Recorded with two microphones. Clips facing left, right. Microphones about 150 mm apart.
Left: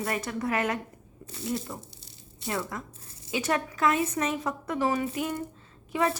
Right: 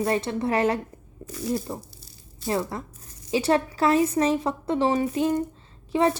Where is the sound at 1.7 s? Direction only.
30° right (ahead or behind).